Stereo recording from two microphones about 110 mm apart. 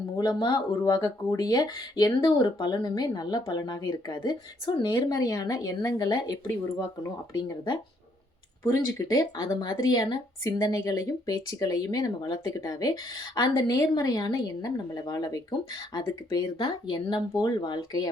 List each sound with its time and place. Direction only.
0.2 s speech: 40° left (ahead or behind)
8.6 s speech: 30° left (ahead or behind)